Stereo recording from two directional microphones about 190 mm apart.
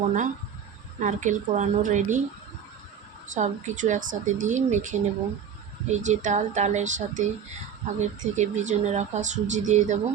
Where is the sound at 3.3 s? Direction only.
40° right (ahead or behind).